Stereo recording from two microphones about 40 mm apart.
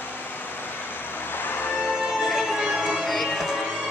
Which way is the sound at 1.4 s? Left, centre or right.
Left.